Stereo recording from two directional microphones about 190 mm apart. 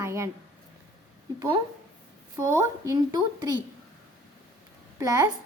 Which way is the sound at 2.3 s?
15° right (ahead or behind).